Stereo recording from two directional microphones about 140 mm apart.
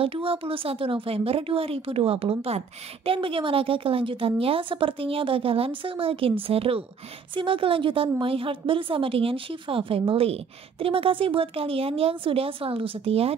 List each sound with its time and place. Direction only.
0.0 s a woman's voice: 40° right (ahead or behind)